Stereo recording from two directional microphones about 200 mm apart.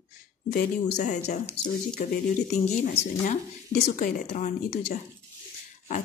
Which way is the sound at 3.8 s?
35° left (ahead or behind).